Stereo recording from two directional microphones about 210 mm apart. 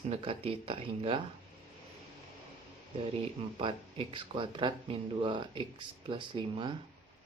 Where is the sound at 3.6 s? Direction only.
25° right (ahead or behind).